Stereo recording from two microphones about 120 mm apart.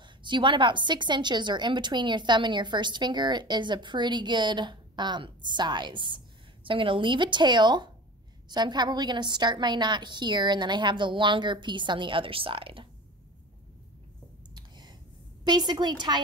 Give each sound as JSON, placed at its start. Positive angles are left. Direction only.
{"t": 0.0, "sound": "a woman's voice", "side_deg": -40}
{"t": 14.5, "sound": "a sound", "side_deg": -35}
{"t": 15.4, "sound": "a woman's voice", "side_deg": -35}